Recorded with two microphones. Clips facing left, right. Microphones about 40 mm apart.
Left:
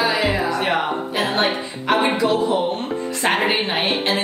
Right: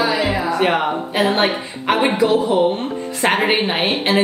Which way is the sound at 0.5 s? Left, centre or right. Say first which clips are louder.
Right 3 dB; centre.